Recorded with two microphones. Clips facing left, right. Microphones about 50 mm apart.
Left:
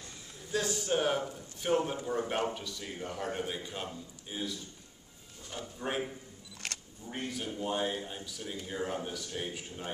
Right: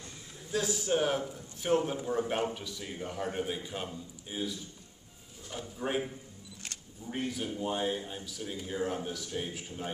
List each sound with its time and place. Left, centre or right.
0.5 s speech: centre
6.6 s a sound: left
7.1 s speech: centre